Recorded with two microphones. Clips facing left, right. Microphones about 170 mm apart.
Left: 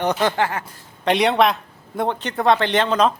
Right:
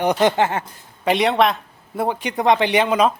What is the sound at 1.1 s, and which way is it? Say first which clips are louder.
A man's voice: even; centre (ahead or behind).